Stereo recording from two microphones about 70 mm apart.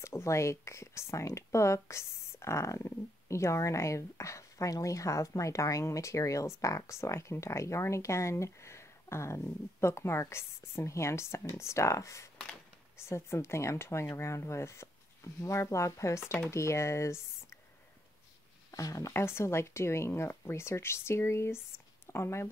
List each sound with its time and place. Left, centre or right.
0.0 s speech: left
18.7 s speech: left
19.1 s speech: left